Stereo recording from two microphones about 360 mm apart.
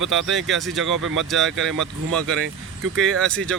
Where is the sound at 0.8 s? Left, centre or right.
Right.